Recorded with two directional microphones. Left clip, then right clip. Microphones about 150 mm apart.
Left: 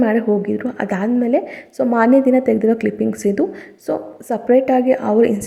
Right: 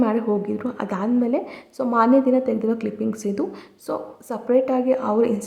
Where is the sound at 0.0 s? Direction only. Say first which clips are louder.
Left 5 dB; 15° left (ahead or behind).